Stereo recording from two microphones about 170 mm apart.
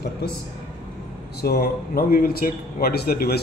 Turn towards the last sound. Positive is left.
turn(degrees=65)  # may be behind; listen again after turning